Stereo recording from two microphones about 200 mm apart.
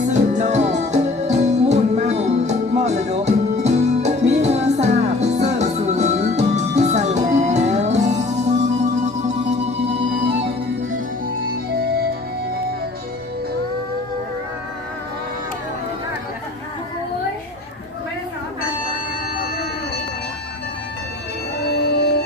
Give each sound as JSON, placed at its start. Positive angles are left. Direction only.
{"t": 0.1, "sound": "music", "side_deg": -35}
{"t": 10.9, "sound": "music", "side_deg": -45}
{"t": 21.7, "sound": "music", "side_deg": 55}